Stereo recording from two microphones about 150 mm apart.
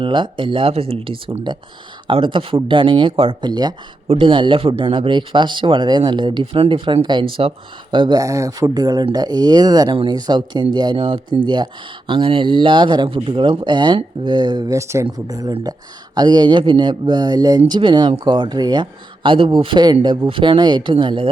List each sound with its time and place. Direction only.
0.0 s speech: 35° right (ahead or behind)